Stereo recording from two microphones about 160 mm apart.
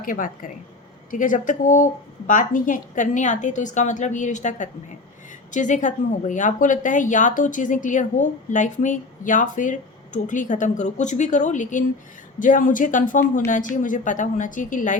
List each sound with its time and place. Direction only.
0.0 s a woman's voice: 55° left (ahead or behind)